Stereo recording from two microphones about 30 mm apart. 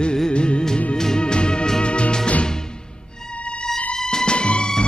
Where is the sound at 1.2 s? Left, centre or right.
Left.